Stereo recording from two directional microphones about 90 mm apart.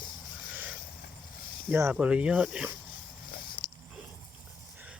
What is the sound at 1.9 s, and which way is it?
Speech, 15° right (ahead or behind).